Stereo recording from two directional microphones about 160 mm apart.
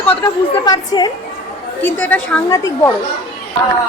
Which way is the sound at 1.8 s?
10° left (ahead or behind).